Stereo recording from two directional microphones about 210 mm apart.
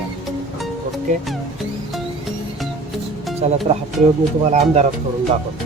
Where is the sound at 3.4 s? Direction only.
30° right (ahead or behind).